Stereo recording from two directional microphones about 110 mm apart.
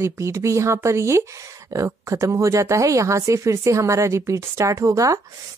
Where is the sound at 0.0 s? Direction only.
25° right (ahead or behind).